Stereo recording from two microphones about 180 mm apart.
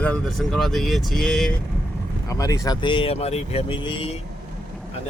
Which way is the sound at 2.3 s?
20° left (ahead or behind).